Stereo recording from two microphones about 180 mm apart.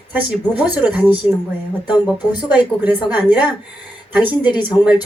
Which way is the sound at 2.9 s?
25° left (ahead or behind).